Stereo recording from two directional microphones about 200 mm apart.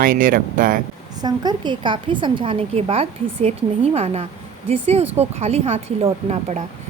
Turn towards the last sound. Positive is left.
turn(degrees=-30)  # may be behind; listen again after turning